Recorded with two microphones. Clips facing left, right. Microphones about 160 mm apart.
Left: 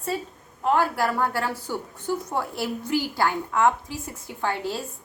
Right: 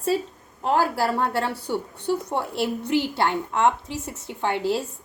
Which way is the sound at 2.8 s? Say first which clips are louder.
Right 2 dB; 70° right (ahead or behind).